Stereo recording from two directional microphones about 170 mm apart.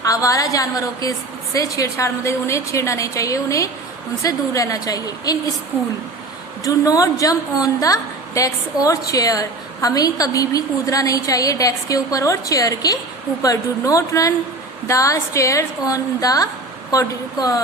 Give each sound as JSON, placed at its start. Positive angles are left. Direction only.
{"t": 0.0, "sound": "a woman's voice", "side_deg": 20}
{"t": 6.7, "sound": "a woman's voice", "side_deg": 20}